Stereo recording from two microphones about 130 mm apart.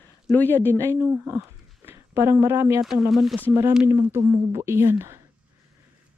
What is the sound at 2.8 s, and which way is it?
Speech, centre (ahead or behind).